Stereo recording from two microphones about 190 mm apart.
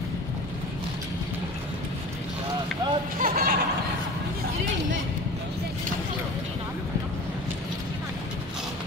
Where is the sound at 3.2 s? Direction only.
50° right (ahead or behind).